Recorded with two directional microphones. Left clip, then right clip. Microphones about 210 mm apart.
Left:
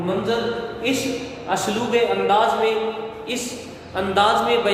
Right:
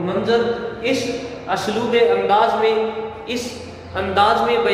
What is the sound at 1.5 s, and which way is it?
A man's voice, 25° left (ahead or behind).